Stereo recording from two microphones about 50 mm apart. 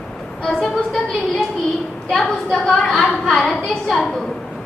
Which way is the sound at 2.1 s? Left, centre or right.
Centre.